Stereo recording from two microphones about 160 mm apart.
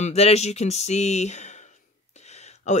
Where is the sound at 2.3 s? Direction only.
45° left (ahead or behind).